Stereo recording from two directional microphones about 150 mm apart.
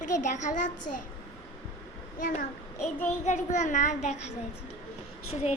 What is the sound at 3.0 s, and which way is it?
A child's voice, 50° left (ahead or behind).